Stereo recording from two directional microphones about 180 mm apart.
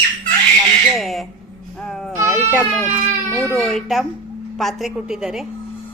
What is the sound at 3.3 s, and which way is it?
Speech, 15° left (ahead or behind).